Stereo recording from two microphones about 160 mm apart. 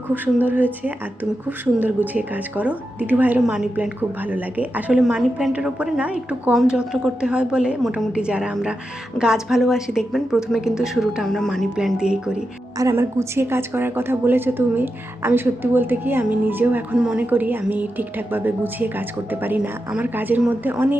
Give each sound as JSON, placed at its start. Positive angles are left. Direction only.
{"t": 0.1, "sound": "a woman's voice", "side_deg": -10}
{"t": 12.8, "sound": "a woman's voice", "side_deg": -15}